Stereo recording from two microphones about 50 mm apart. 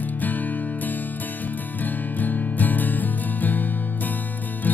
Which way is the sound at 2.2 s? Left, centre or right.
Left.